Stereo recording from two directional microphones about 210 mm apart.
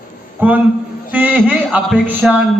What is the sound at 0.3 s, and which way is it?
A man's voice, 10° right (ahead or behind).